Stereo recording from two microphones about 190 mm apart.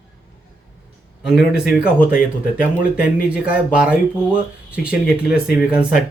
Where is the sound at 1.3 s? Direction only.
5° right (ahead or behind).